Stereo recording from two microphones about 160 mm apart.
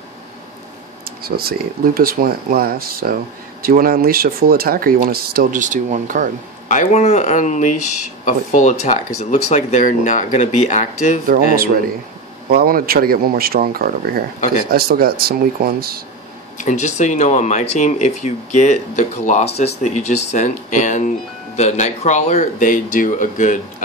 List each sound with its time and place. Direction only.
1.2 s speech: 70° right (ahead or behind); by 6.2 s 55° right (ahead or behind)
6.7 s speech: 50° left (ahead or behind)
11.2 s speech: 65° right (ahead or behind)
16.5 s speech: 45° left (ahead or behind)